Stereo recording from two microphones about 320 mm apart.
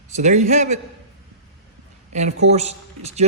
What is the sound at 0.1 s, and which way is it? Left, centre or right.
Speech, right.